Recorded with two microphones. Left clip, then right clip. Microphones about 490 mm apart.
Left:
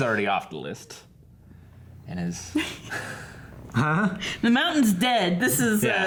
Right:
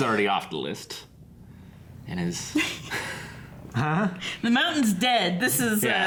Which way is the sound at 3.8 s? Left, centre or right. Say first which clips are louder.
Left 2 dB; centre.